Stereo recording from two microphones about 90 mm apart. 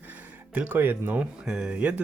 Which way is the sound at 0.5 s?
20° right (ahead or behind).